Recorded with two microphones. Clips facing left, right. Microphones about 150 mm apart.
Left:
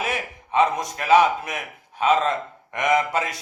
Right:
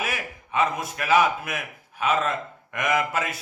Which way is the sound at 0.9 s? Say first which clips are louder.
Left 4 dB; 30° left (ahead or behind).